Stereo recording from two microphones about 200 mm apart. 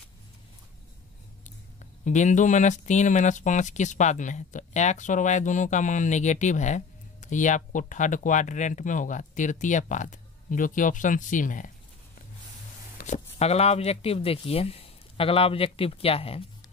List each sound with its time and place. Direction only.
2.0 s speech: 40° left (ahead or behind)
12.9 s speech: 35° left (ahead or behind)